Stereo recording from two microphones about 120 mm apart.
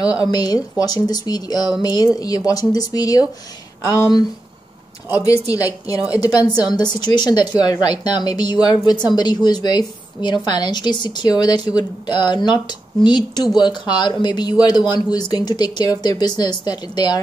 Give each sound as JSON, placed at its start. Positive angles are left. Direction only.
{"t": 0.3, "sound": "speech", "side_deg": 35}